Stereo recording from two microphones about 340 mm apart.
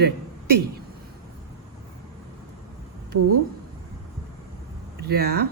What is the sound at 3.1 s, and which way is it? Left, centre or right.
Speech, right.